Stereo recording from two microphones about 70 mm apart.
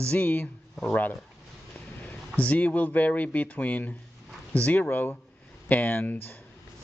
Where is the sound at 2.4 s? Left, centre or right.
Left.